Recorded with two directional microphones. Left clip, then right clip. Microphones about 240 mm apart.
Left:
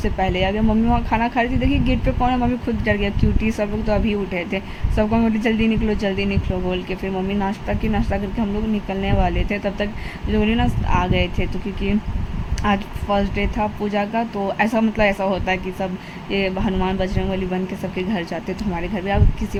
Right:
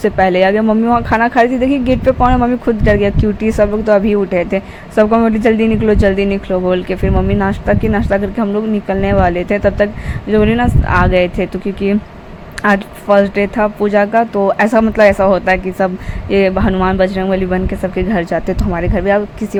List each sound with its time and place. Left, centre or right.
0.0 s speech: centre
12.6 s speech: centre